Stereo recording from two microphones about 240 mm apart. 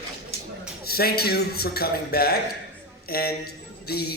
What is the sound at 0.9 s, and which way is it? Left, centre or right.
Speech, left.